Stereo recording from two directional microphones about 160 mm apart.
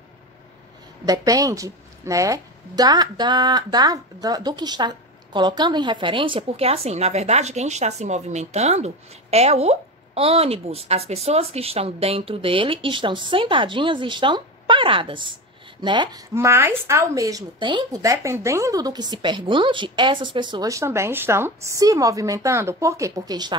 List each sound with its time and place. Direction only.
1.0 s a woman's voice: 20° right (ahead or behind)
16.3 s speech: 15° right (ahead or behind)